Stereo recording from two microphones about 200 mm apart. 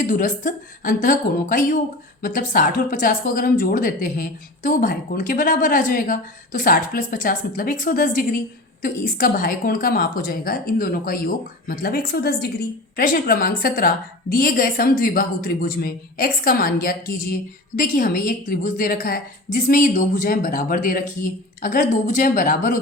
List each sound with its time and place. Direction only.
0.0 s a woman's voice: 40° left (ahead or behind)